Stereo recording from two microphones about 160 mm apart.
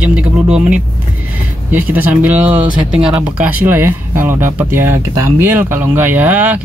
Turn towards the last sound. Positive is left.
turn(degrees=-10)  # may be behind; listen again after turning